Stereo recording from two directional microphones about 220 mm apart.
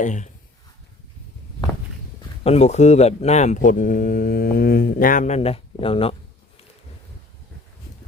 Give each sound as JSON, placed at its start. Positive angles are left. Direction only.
{"t": 0.0, "sound": "speech", "side_deg": 35}
{"t": 2.4, "sound": "speech", "side_deg": 30}